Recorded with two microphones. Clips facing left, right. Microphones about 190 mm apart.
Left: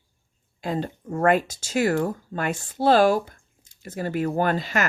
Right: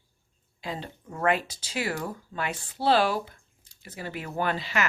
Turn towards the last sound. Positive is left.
turn(degrees=45)  # may be behind; listen again after turning